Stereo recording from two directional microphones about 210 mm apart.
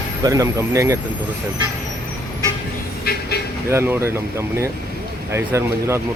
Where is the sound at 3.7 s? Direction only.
10° right (ahead or behind).